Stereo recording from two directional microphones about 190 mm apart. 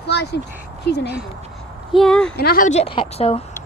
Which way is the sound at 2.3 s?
50° left (ahead or behind).